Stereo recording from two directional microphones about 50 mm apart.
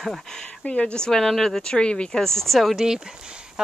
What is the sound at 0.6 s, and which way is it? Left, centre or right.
Speech, left.